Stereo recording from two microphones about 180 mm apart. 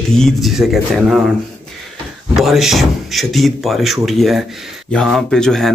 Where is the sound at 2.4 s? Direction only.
Centre (ahead or behind).